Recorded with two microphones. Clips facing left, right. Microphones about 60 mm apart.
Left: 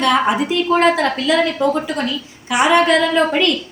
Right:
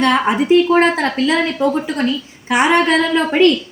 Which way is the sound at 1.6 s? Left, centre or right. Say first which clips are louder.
Right 1 dB; right.